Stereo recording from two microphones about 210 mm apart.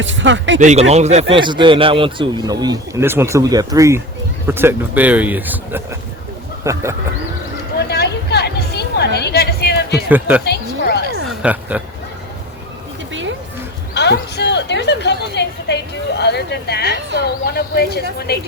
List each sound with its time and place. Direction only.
0.0 s speech: 60° right (ahead or behind)
0.6 s speech: 35° right (ahead or behind); by 6.8 s 15° right (ahead or behind)
7.9 s vehicle: 50° left (ahead or behind)
9.3 s a sound: 50° left (ahead or behind)
10.1 s speech: 10° right (ahead or behind)
10.4 s a sound: 50° left (ahead or behind)
11.4 s speech: 5° right (ahead or behind)
13.9 s a sound: 55° left (ahead or behind)
18.3 s a woman's voice: 50° left (ahead or behind)